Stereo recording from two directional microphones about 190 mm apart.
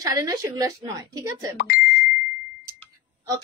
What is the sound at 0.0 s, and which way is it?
A woman's voice, 15° right (ahead or behind).